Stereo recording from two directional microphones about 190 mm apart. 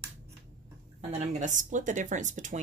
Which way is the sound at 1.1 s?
40° right (ahead or behind).